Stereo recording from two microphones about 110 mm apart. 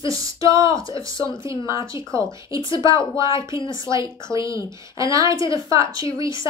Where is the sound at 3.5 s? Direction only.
45° left (ahead or behind).